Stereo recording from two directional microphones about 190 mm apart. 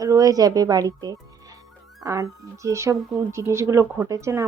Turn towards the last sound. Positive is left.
turn(degrees=-15)  # may be behind; listen again after turning